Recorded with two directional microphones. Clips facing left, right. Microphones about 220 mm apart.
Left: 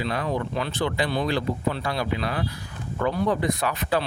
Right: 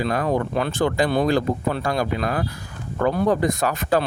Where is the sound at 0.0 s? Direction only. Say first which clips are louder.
Right 5 dB; 45° right (ahead or behind).